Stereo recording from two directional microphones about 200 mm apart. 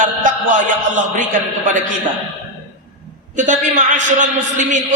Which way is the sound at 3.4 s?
40° right (ahead or behind).